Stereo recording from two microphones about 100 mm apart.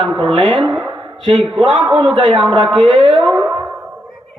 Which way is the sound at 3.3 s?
45° right (ahead or behind).